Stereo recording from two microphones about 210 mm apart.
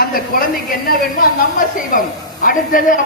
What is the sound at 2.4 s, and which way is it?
Speech, 40° left (ahead or behind).